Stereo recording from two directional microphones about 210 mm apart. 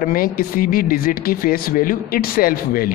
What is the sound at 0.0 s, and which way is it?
Speech, 45° left (ahead or behind).